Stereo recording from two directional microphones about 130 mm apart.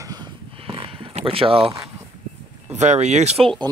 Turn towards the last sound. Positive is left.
turn(degrees=-55)  # may be behind; listen again after turning